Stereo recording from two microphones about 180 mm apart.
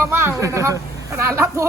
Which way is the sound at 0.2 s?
15° right (ahead or behind).